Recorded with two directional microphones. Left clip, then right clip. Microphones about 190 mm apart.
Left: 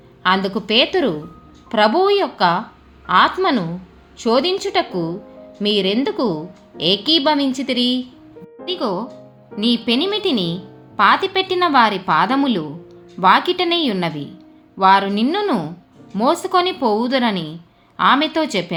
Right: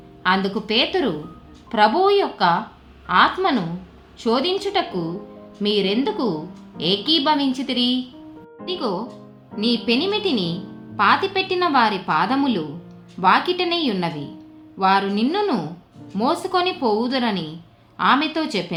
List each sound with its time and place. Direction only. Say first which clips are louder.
0.2 s a woman's voice: left 3 dB; 30° left (ahead or behind)